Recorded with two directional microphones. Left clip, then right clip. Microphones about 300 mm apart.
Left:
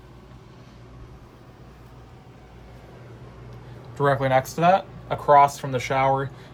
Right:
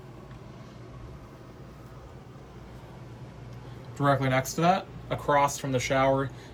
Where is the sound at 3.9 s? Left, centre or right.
Left.